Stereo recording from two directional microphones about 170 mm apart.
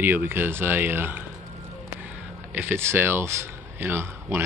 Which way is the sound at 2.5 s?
10° right (ahead or behind).